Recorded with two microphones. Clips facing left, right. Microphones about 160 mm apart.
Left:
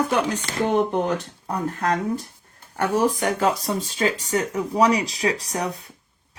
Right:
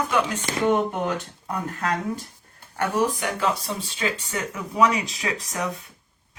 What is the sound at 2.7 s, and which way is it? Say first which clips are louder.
Speech: left 3 dB; 40° left (ahead or behind).